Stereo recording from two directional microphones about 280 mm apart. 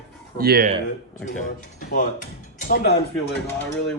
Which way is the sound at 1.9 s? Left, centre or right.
Left.